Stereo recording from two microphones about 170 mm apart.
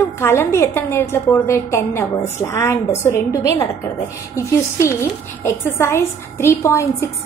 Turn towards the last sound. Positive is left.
turn(degrees=15)  # may be behind; listen again after turning